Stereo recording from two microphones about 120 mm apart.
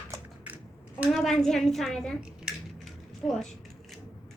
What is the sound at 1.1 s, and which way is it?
A woman's voice, centre (ahead or behind).